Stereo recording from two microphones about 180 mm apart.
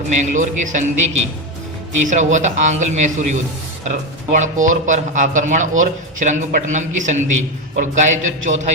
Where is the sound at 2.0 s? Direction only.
40° right (ahead or behind).